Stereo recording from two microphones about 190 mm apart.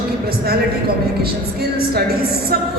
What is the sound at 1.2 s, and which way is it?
A woman's voice, 55° right (ahead or behind).